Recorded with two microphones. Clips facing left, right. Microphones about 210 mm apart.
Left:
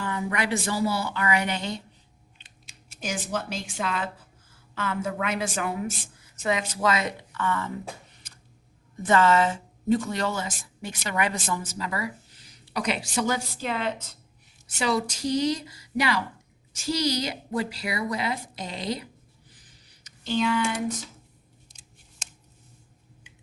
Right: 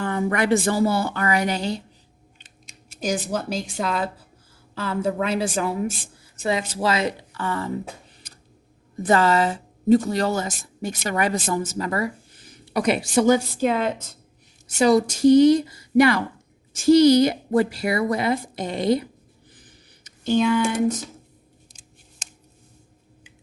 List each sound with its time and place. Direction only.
0.0 s a woman's voice: 50° right (ahead or behind)
3.0 s a woman's voice: 40° right (ahead or behind)
9.0 s a woman's voice: 35° right (ahead or behind); by 19.0 s 55° right (ahead or behind)
20.1 s speech: 50° right (ahead or behind)